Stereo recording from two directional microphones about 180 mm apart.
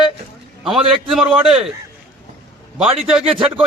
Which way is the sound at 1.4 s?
5° right (ahead or behind).